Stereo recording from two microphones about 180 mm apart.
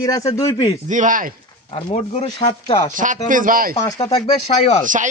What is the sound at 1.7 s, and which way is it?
Speech, 35° left (ahead or behind).